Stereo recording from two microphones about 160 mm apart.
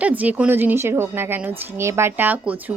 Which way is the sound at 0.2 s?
10° right (ahead or behind).